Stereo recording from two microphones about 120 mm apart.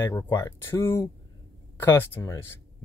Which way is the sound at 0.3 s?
25° left (ahead or behind).